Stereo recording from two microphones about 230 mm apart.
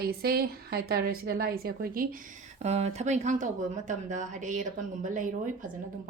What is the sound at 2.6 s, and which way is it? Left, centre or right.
Speech, right.